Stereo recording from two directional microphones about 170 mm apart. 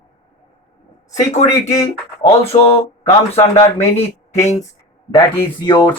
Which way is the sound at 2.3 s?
35° left (ahead or behind).